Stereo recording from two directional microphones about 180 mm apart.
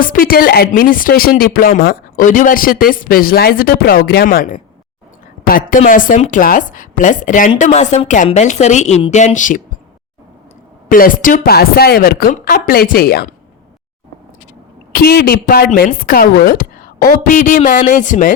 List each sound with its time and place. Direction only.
0.0 s a woman's voice: 50° left (ahead or behind)
10.8 s speech: 50° left (ahead or behind)
14.9 s speech: 55° left (ahead or behind)